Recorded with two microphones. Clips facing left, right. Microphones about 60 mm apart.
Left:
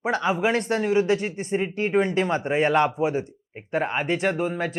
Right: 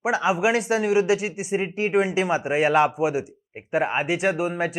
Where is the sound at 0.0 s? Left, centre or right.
Centre.